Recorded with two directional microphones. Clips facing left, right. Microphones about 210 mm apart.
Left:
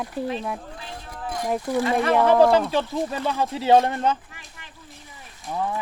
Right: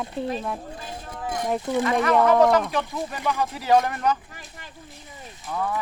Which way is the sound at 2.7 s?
30° left (ahead or behind).